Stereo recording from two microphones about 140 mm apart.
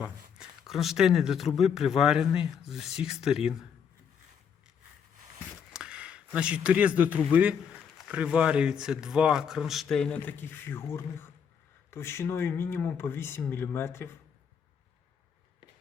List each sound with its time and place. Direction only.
0.0 s speech: 5° right (ahead or behind)
5.7 s speech: 5° right (ahead or behind); by 14.1 s 15° left (ahead or behind)